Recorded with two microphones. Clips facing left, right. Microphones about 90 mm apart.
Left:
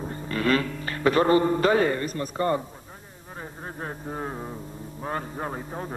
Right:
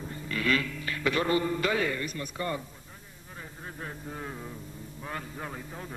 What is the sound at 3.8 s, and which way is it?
Speech, 40° left (ahead or behind).